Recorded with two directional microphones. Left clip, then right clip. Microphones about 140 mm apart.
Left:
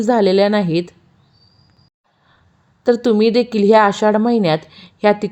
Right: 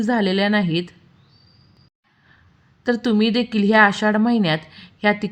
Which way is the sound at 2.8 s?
25° left (ahead or behind).